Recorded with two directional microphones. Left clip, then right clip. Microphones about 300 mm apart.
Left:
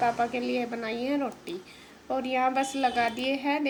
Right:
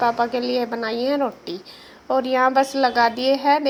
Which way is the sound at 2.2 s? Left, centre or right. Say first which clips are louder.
Right 8 dB; centre.